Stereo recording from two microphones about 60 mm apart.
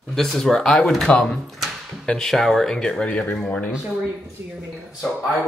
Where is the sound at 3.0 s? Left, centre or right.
Centre.